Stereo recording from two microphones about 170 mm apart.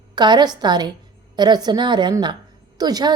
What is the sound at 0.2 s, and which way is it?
A woman's voice, 25° right (ahead or behind).